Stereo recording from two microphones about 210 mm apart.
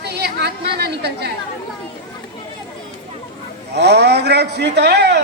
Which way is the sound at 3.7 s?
50° right (ahead or behind).